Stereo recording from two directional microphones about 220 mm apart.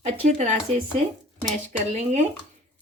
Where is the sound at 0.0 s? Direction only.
30° right (ahead or behind).